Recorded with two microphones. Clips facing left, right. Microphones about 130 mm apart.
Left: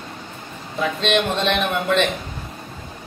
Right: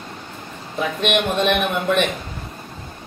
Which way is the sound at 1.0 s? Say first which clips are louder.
Right 1 dB; 15° right (ahead or behind).